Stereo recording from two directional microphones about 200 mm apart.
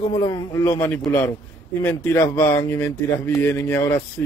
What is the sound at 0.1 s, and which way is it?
Speech, 20° left (ahead or behind).